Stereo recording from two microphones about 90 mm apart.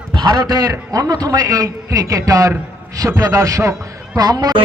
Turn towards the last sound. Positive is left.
turn(degrees=-50)  # may be behind; listen again after turning